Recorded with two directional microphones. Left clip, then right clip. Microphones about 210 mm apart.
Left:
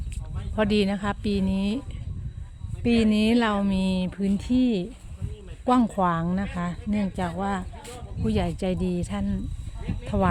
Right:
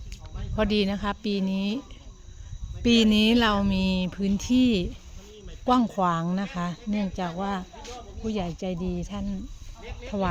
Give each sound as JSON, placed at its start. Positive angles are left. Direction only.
{"t": 0.5, "sound": "speech", "side_deg": 10}
{"t": 2.8, "sound": "speech", "side_deg": 0}
{"t": 5.6, "sound": "speech", "side_deg": 10}
{"t": 7.8, "sound": "a sound", "side_deg": 55}
{"t": 8.2, "sound": "speech", "side_deg": 25}